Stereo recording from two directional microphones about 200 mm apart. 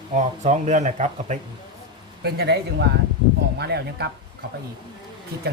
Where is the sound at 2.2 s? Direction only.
55° right (ahead or behind).